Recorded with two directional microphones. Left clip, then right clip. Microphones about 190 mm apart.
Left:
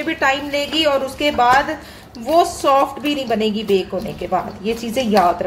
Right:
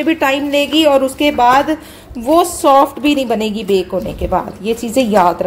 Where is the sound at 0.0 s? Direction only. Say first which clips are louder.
Right 4 dB; 35° right (ahead or behind).